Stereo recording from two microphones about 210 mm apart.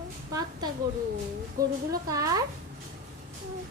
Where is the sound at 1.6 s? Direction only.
40° right (ahead or behind).